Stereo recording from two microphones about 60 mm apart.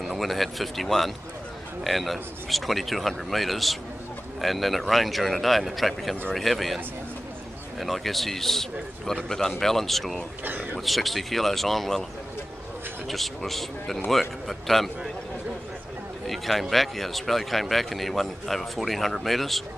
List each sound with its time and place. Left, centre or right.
0.0 s speech: centre
7.8 s speech: centre
10.4 s speech: right
10.9 s speech: centre
13.1 s a man's voice: centre
16.3 s speech: centre